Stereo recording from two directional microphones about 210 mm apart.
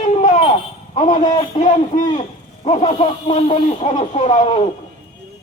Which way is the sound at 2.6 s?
30° left (ahead or behind).